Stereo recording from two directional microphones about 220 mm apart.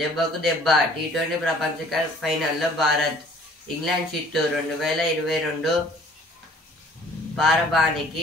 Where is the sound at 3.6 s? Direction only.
Centre (ahead or behind).